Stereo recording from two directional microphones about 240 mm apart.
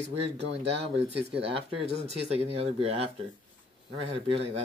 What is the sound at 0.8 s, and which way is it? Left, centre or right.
Speech, right.